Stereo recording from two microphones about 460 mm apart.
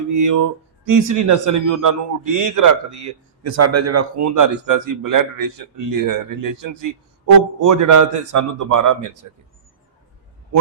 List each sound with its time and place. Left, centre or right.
0.1 s a man's voice: right